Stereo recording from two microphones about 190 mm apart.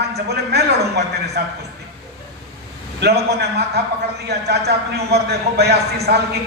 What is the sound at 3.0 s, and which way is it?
Speech, 60° right (ahead or behind).